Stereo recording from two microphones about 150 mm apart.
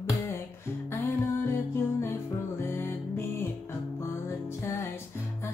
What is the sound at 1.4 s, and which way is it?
Music, 15° left (ahead or behind).